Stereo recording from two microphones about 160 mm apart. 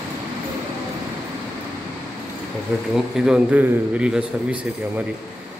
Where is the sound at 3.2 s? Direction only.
5° right (ahead or behind).